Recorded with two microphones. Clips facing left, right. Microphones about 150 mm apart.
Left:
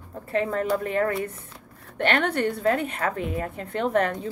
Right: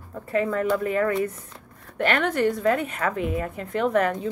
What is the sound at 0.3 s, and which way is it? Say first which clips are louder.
A woman's voice: right 1 dB; 30° left (ahead or behind).